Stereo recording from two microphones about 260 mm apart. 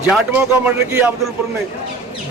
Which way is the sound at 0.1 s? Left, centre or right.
Centre.